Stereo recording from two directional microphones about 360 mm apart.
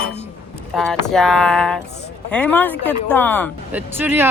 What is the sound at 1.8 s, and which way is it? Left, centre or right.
Speech, left.